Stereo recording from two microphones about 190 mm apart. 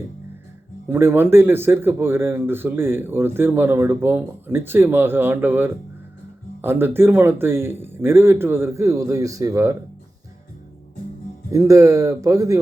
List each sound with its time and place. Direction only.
0.9 s speech: 10° right (ahead or behind)
11.5 s speech: 15° right (ahead or behind)